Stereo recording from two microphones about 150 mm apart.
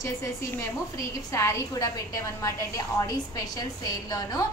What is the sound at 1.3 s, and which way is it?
A woman's voice, 20° left (ahead or behind).